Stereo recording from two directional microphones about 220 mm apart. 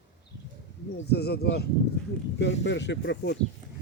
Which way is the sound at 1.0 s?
45° left (ahead or behind).